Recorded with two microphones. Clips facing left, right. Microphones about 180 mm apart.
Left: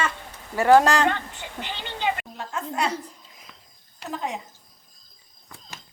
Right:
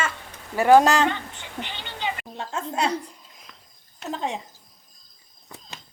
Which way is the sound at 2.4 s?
25° right (ahead or behind).